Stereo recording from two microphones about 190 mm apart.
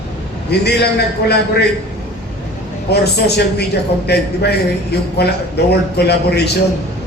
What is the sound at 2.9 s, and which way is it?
A man's voice, 60° left (ahead or behind).